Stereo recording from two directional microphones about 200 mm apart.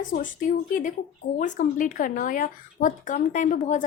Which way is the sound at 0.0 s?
40° left (ahead or behind).